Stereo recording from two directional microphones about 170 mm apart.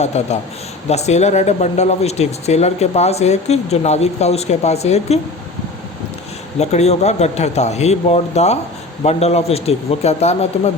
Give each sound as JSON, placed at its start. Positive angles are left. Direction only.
{"t": 0.0, "sound": "speech", "side_deg": 40}
{"t": 6.6, "sound": "speech", "side_deg": 40}